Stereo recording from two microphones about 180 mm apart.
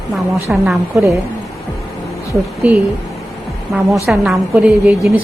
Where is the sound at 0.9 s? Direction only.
15° right (ahead or behind).